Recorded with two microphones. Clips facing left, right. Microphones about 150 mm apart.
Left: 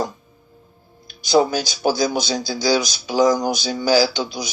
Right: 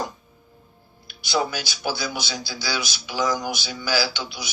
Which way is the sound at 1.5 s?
40° left (ahead or behind).